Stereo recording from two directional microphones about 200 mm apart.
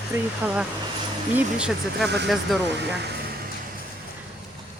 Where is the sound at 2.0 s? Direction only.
55° right (ahead or behind).